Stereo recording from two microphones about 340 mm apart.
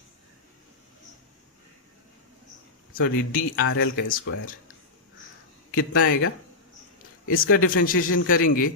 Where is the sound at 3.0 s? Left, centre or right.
Left.